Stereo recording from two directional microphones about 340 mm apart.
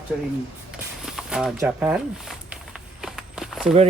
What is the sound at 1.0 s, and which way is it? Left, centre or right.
Speech, centre.